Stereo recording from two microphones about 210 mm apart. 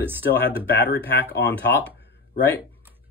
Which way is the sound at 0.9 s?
50° left (ahead or behind).